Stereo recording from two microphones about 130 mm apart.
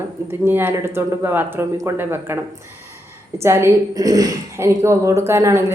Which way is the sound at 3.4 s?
20° right (ahead or behind).